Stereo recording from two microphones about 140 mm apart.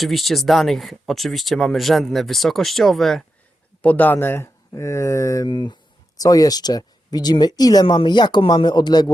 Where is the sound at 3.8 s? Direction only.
10° left (ahead or behind); by 9.1 s 30° left (ahead or behind).